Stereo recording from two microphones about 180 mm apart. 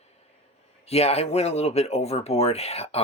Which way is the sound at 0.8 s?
35° left (ahead or behind).